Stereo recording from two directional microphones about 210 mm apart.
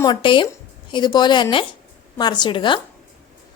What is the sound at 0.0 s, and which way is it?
A woman's voice, 20° left (ahead or behind).